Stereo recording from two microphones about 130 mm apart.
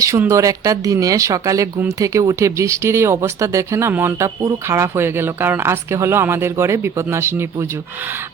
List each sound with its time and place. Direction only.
0.0 s speech: 25° right (ahead or behind)